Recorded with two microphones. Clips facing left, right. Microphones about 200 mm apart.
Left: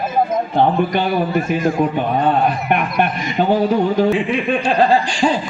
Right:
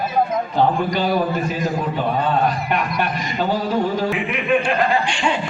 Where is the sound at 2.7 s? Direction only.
55° left (ahead or behind).